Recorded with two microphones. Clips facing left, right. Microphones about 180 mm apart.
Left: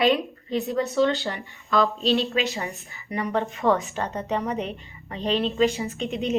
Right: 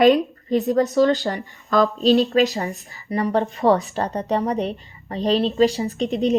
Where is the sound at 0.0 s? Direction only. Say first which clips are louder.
Right 7 dB; 45° right (ahead or behind).